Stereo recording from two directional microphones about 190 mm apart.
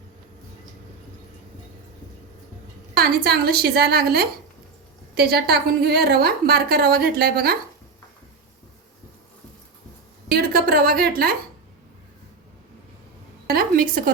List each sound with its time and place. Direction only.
2.9 s a woman's voice: 55° right (ahead or behind)
10.2 s a woman's voice: 55° right (ahead or behind)
13.5 s a woman's voice: 50° right (ahead or behind)